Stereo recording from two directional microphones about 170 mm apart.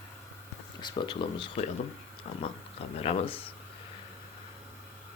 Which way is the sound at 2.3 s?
40° left (ahead or behind).